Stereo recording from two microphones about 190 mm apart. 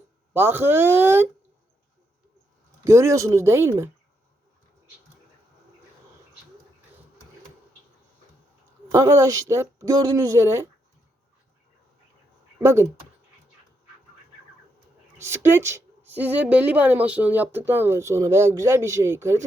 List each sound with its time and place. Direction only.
0.3 s a woman's voice: 10° right (ahead or behind)
2.8 s a woman's voice: 15° right (ahead or behind)
8.9 s a woman's voice: 15° right (ahead or behind)
12.6 s a woman's voice: 15° right (ahead or behind)
15.2 s a woman's voice: 10° right (ahead or behind)